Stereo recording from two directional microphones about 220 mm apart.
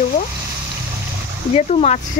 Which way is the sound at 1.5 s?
30° left (ahead or behind).